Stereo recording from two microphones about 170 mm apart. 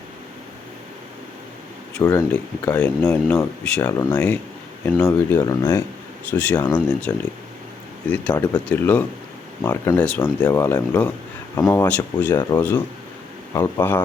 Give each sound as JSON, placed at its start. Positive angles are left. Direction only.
{"t": 2.0, "sound": "speech", "side_deg": 20}
{"t": 2.3, "sound": "speech", "side_deg": 5}
{"t": 3.0, "sound": "speech", "side_deg": 15}